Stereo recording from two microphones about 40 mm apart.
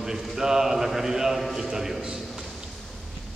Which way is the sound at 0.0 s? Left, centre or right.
Centre.